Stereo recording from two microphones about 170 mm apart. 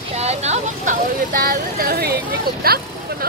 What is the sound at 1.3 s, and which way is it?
Speech, 60° right (ahead or behind).